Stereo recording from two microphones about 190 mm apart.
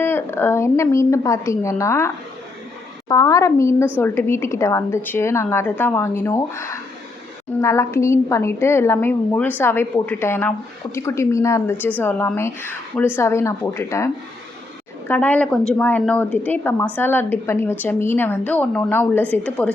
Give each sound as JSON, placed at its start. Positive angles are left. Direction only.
{"t": 0.0, "sound": "a woman's voice", "side_deg": 10}